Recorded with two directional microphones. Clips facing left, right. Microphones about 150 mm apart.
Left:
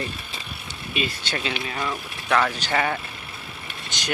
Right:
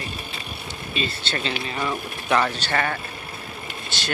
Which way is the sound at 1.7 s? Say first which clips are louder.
Right 2 dB; 5° right (ahead or behind).